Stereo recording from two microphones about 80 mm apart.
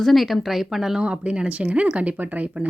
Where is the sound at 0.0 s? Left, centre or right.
Centre.